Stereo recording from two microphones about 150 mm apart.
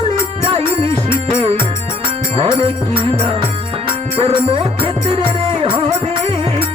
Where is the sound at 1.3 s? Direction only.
40° right (ahead or behind).